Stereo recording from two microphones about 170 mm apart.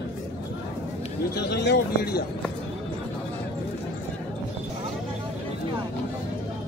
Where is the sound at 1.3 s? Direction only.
75° left (ahead or behind).